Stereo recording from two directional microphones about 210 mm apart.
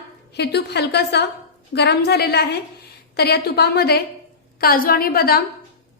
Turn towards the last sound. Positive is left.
turn(degrees=45)  # may be behind; listen again after turning